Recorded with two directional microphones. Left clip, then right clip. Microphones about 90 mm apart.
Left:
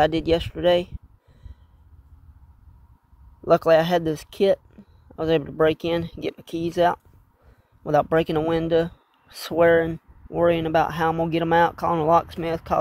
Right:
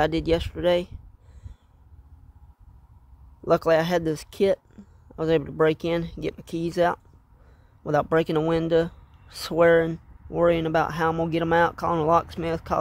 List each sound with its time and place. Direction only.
0.0 s speech: centre (ahead or behind)
3.4 s speech: 10° right (ahead or behind)